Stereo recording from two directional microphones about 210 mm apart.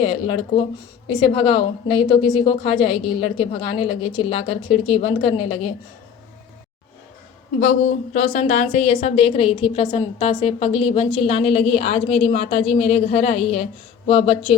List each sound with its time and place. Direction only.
0.0 s speech: 25° left (ahead or behind)
8.1 s a woman's voice: 35° left (ahead or behind)